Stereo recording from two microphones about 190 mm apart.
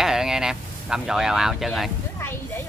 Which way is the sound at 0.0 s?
Centre (ahead or behind).